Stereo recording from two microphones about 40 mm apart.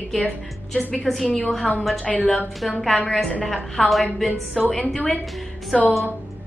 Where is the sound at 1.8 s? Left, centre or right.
Centre.